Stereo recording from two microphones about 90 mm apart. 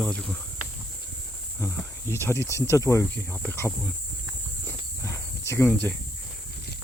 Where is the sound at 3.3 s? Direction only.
20° left (ahead or behind).